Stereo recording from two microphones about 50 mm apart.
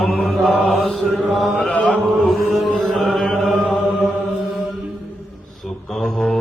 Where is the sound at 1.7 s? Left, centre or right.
Left.